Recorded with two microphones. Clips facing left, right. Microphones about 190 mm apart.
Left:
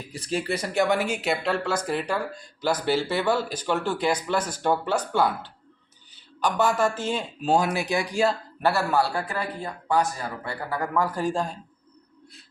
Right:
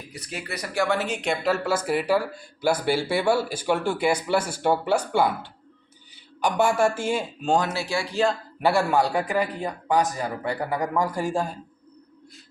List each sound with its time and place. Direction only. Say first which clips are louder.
0.1 s speech: left 8 dB; 30° left (ahead or behind); by 7.3 s 10° right (ahead or behind)
7.4 s speech: left 2 dB; 10° left (ahead or behind)
8.6 s speech: right 2 dB; 15° right (ahead or behind)